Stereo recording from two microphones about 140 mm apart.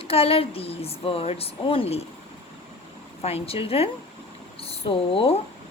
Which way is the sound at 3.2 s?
45° left (ahead or behind).